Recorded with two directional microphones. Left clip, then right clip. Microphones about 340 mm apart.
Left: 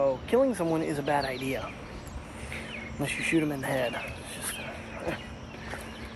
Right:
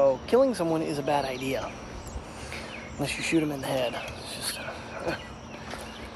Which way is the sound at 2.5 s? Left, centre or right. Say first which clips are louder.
Left 1 dB; centre.